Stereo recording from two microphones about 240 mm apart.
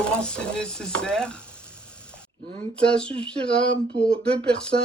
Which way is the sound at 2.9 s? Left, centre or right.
Centre.